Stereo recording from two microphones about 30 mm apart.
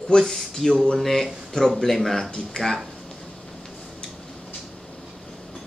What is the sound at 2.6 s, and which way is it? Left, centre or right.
Speech, left.